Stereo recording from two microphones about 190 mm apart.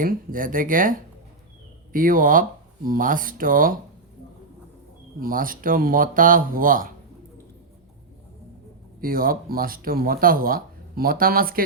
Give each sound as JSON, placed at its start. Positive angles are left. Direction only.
{"t": 0.0, "sound": "speech", "side_deg": -45}
{"t": 5.2, "sound": "speech", "side_deg": -45}
{"t": 9.0, "sound": "speech", "side_deg": -50}